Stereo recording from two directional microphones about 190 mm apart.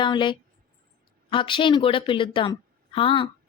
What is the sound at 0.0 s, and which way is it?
A woman's voice, 25° left (ahead or behind).